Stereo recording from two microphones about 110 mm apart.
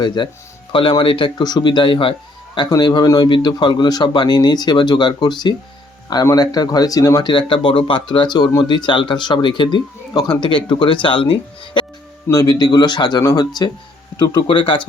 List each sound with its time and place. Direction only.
0.0 s speech: 45° left (ahead or behind)
2.6 s a man's voice: 40° left (ahead or behind)
7.3 s speech: 50° left (ahead or behind)
12.3 s a man's voice: 35° left (ahead or behind); by 14.8 s 50° left (ahead or behind)